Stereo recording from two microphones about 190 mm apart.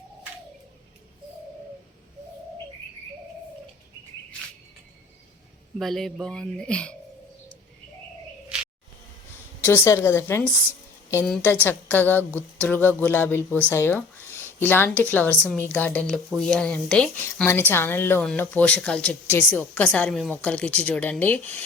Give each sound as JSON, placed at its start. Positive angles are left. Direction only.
{"t": 5.8, "sound": "speech", "side_deg": 0}
{"t": 8.5, "sound": "a sound", "side_deg": -5}
{"t": 9.6, "sound": "speech", "side_deg": 15}